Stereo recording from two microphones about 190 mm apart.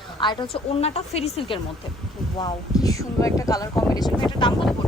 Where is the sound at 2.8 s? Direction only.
15° left (ahead or behind).